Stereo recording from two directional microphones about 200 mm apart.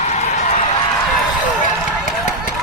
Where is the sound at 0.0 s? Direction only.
35° left (ahead or behind).